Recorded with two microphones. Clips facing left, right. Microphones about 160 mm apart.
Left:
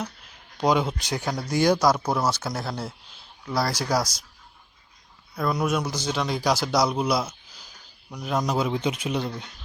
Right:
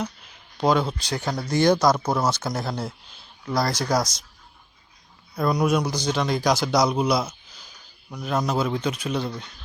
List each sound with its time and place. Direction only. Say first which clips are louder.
0.7 s speech: right 1 dB; 15° left (ahead or behind)
5.3 s speech: right 3 dB; 10° right (ahead or behind)
5.6 s speech: right 3 dB; 5° left (ahead or behind)
8.7 s speech: even; 20° left (ahead or behind)